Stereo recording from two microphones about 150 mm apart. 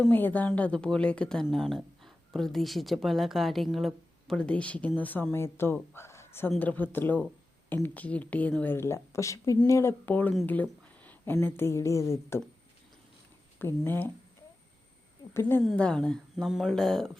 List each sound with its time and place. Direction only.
0.1 s a woman's voice: 10° left (ahead or behind)
13.6 s speech: 15° left (ahead or behind)
15.3 s speech: 15° left (ahead or behind)